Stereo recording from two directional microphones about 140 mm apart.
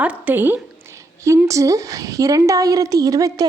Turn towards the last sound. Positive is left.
turn(degrees=-25)  # may be behind; listen again after turning